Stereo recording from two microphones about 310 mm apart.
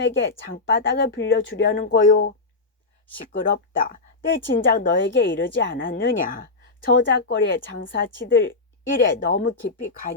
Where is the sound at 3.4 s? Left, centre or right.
Left.